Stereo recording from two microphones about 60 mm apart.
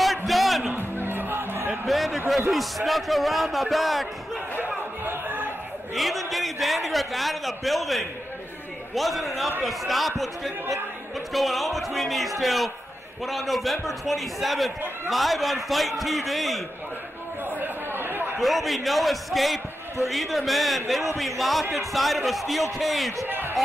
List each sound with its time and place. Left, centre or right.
0.0 s music: centre
0.9 s music: right
1.9 s a man's voice: centre
5.0 s crowd: right
5.9 s a man's voice: centre
17.5 s chatter: right
18.4 s a man's voice: centre
23.2 s a sound: right